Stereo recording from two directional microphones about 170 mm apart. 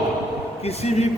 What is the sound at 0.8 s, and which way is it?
Speech, 40° left (ahead or behind).